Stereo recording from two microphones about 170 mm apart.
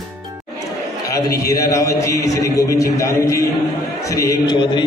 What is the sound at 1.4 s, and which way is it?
A man's voice, 20° left (ahead or behind).